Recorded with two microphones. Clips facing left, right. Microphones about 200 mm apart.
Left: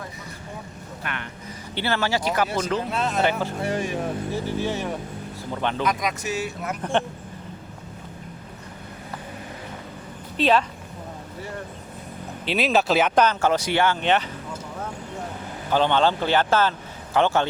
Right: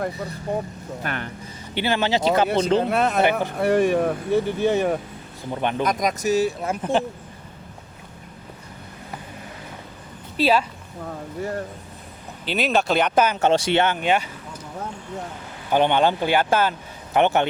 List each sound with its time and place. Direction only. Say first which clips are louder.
0.5 s speech: right 14 dB; 60° right (ahead or behind)
1.0 s speech: right 4 dB; 40° right (ahead or behind)
1.7 s speech: right 3 dB; 15° right (ahead or behind)
2.8 s speech: right 4 dB; 60° right (ahead or behind)
5.5 s speech: right 2 dB; 15° right (ahead or behind)
5.8 s speech: right 3 dB; 40° right (ahead or behind)
10.4 s speech: even; 10° right (ahead or behind)
12.5 s speech: even; centre (ahead or behind)
13.2 s speech: right 2 dB; 20° right (ahead or behind)
14.0 s speech: even; 10° right (ahead or behind)
15.7 s speech: right 2 dB; 15° right (ahead or behind)